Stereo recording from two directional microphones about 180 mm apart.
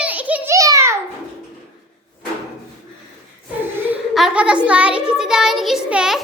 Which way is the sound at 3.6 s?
10° right (ahead or behind).